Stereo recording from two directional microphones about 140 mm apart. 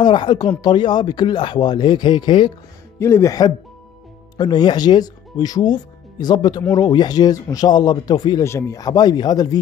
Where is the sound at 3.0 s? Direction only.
20° left (ahead or behind).